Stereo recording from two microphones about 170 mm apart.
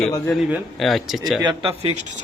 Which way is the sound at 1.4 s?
30° right (ahead or behind).